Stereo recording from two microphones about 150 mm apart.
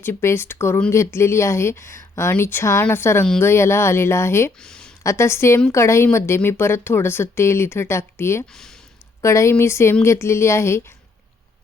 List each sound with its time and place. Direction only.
0.0 s speech: 15° left (ahead or behind)
4.6 s a sound: 5° left (ahead or behind)
5.0 s speech: 20° left (ahead or behind)